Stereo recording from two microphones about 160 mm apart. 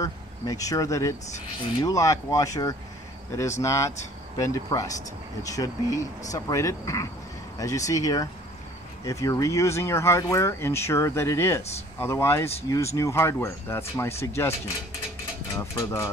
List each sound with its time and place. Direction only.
0.0 s speech: 20° left (ahead or behind)
15.5 s speech: 20° left (ahead or behind)